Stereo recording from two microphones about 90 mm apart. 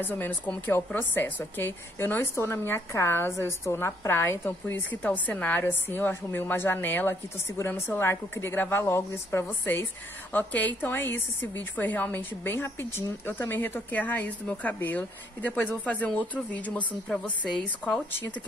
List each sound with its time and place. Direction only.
0.0 s a woman's voice: 20° left (ahead or behind)